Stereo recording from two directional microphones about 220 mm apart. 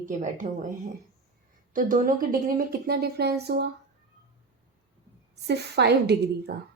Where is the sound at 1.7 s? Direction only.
40° right (ahead or behind).